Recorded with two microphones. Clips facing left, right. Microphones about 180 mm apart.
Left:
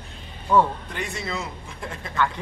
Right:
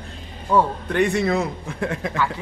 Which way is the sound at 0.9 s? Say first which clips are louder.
Right 12 dB; 65° right (ahead or behind).